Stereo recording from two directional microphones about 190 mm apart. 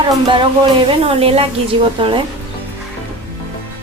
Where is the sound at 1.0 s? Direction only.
30° right (ahead or behind).